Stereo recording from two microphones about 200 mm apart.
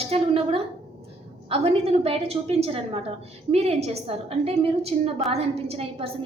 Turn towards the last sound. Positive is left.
turn(degrees=-30)  # may be behind; listen again after turning